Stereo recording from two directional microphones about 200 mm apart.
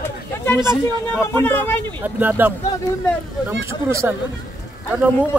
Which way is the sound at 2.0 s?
10° right (ahead or behind).